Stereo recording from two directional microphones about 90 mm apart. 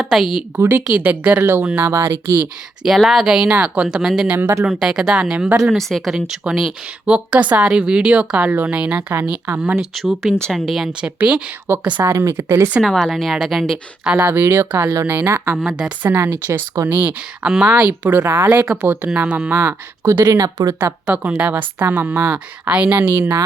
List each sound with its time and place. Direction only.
0.0 s speech: centre (ahead or behind)
0.5 s speech: 25° right (ahead or behind)
2.8 s speech: centre (ahead or behind)
4.3 s speech: 25° right (ahead or behind)
4.8 s speech: 10° right (ahead or behind)
9.9 s speech: centre (ahead or behind)
11.7 s speech: 25° right (ahead or behind)
12.8 s speech: centre (ahead or behind)
14.2 s speech: 25° right (ahead or behind)
15.5 s speech: 5° right (ahead or behind)
16.0 s speech: 25° right (ahead or behind)
20.2 s speech: 40° right (ahead or behind)
20.7 s speech: 20° right (ahead or behind)